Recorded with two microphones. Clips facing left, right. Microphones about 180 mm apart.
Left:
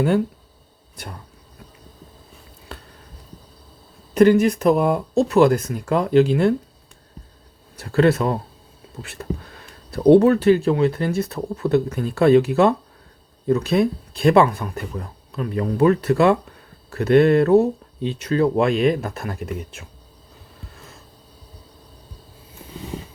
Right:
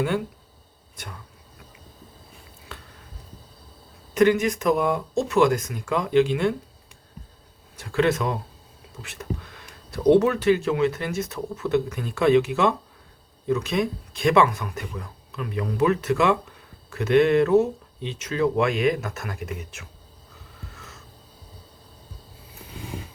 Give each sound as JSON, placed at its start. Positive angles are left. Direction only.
{"t": 4.1, "sound": "speech", "side_deg": 35}
{"t": 7.8, "sound": "speech", "side_deg": 35}
{"t": 20.7, "sound": "a sound", "side_deg": 30}